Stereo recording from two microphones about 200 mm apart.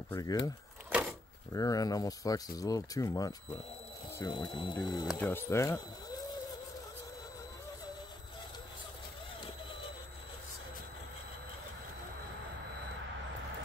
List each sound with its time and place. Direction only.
0.1 s speech: 20° left (ahead or behind)
1.5 s speech: 15° left (ahead or behind)
5.0 s speech: 10° left (ahead or behind)